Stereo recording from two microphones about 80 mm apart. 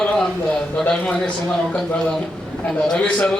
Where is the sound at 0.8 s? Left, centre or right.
Centre.